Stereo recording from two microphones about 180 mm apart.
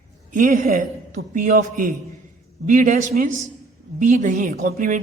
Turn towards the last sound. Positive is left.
turn(degrees=-45)  # may be behind; listen again after turning